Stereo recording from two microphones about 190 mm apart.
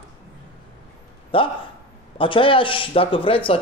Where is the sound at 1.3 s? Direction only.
25° left (ahead or behind).